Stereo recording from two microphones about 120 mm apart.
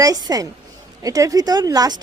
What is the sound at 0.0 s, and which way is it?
A woman's voice, 30° right (ahead or behind).